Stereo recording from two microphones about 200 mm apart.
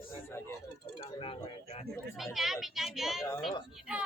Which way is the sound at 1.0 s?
25° left (ahead or behind).